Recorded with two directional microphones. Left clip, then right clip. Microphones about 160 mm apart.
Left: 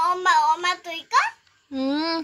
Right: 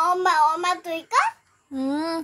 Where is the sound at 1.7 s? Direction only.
5° left (ahead or behind).